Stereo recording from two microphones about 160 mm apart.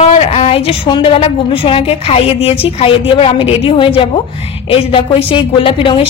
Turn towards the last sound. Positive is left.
turn(degrees=35)  # may be behind; listen again after turning